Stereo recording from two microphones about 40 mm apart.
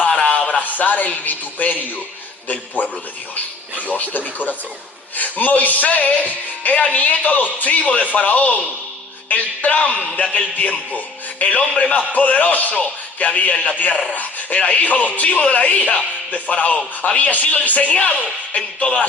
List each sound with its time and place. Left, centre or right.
0.1 s a sound: left
0.3 s a man's voice: left
3.9 s speech: left